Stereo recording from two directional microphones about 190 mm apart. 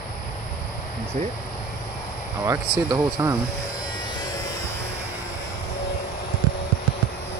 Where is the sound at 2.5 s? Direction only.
15° right (ahead or behind).